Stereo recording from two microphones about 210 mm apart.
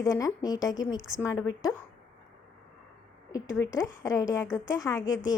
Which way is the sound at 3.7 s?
15° left (ahead or behind).